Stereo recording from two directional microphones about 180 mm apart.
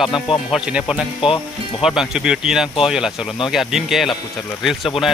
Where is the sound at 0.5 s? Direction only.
5° right (ahead or behind).